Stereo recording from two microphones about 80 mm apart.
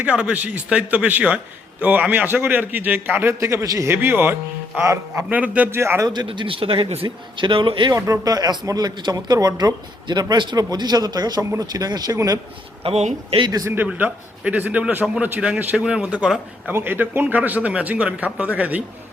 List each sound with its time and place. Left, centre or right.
0.0 s a man's voice: centre; by 3.9 s right
3.9 s a man's voice: right
4.8 s a man's voice: right
5.3 s a man's voice: centre
5.7 s a man's voice: right
6.1 s speech: right
7.9 s a man's voice: right
8.3 s speech: right
13.8 s a man's voice: centre
16.7 s a man's voice: right